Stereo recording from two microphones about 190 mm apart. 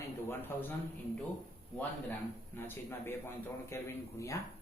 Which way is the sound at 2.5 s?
10° left (ahead or behind).